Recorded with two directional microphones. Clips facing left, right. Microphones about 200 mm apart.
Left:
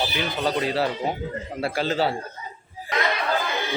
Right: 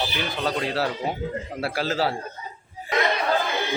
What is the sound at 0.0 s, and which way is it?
Speech, centre (ahead or behind).